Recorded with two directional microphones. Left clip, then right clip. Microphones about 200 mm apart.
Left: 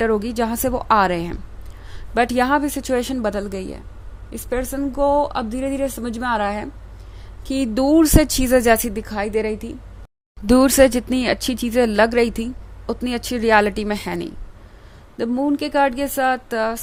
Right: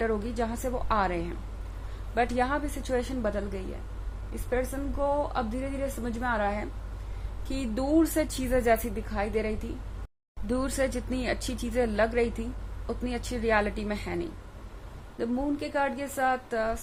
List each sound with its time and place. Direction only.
0.0 s a woman's voice: 50° left (ahead or behind)